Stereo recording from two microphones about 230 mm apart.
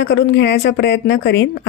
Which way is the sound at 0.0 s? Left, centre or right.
Left.